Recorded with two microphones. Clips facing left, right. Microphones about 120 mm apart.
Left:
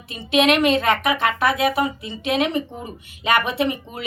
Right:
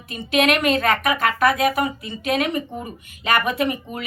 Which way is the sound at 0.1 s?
25° left (ahead or behind).